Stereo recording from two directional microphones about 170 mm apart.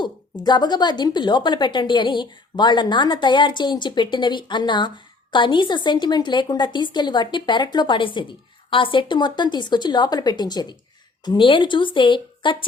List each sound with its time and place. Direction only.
0.0 s a woman's voice: 25° left (ahead or behind)